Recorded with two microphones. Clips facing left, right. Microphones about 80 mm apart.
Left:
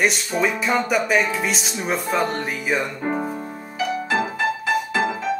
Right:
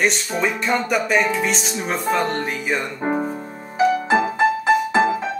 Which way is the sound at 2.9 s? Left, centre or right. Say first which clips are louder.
Right 2 dB; centre.